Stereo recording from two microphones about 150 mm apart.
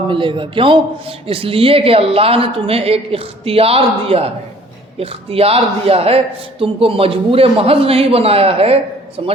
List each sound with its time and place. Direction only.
0.1 s a man's voice: 35° right (ahead or behind)